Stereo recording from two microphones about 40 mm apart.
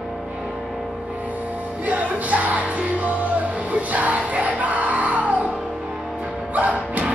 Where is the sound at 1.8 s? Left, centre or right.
Right.